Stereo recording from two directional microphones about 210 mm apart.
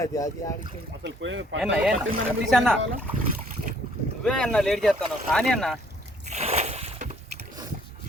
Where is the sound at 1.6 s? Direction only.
5° right (ahead or behind).